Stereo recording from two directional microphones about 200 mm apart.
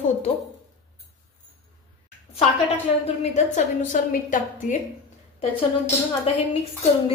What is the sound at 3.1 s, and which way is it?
A woman's voice, 35° left (ahead or behind).